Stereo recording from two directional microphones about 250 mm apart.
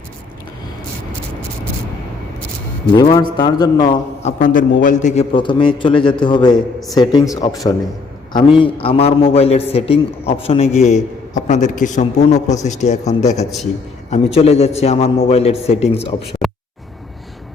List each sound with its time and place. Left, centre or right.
2.9 s a man's voice: centre
4.2 s a man's voice: left